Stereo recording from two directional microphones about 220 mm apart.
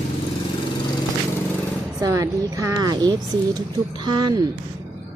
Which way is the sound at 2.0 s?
15° right (ahead or behind).